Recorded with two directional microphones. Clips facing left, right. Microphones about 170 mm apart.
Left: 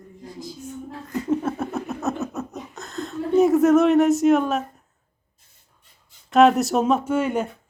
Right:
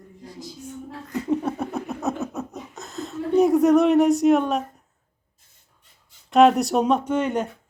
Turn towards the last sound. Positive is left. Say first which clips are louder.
# left 1 dB
turn(degrees=5)  # may be behind; listen again after turning